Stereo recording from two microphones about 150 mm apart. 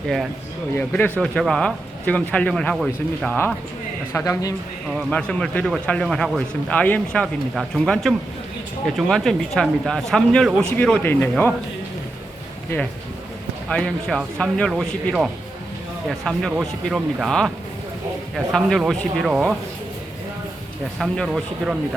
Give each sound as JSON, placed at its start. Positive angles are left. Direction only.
{"t": 0.8, "sound": "speech", "side_deg": 10}
{"t": 4.1, "sound": "speech", "side_deg": 20}
{"t": 4.9, "sound": "speech", "side_deg": 5}
{"t": 13.7, "sound": "speech", "side_deg": 5}
{"t": 21.0, "sound": "speech", "side_deg": 0}